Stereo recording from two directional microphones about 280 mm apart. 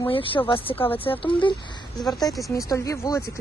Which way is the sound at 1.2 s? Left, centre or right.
Centre.